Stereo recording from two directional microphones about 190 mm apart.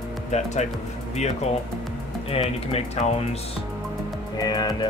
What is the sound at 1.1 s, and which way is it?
Speech, 35° left (ahead or behind).